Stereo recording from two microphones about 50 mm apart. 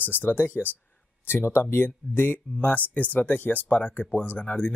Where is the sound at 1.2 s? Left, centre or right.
Left.